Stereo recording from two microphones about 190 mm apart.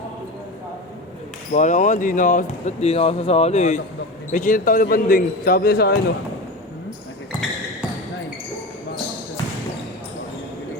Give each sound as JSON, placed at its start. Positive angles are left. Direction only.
{"t": 1.5, "sound": "a man's voice", "side_deg": 40}